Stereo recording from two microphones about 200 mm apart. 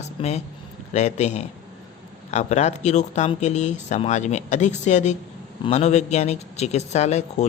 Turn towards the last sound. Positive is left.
turn(degrees=35)  # may be behind; listen again after turning